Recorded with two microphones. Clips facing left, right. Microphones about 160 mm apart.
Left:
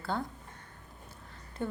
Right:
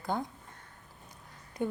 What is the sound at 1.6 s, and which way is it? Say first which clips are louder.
Speech: right 3 dB; 15° right (ahead or behind).